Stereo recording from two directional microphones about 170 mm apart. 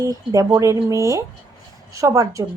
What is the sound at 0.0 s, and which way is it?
A woman's voice, 20° right (ahead or behind).